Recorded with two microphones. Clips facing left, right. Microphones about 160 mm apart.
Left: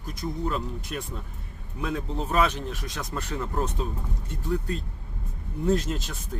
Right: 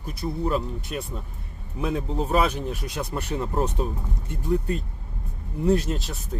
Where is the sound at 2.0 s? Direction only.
30° right (ahead or behind).